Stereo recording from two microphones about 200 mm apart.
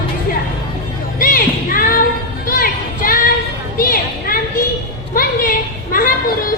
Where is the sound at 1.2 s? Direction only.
45° left (ahead or behind).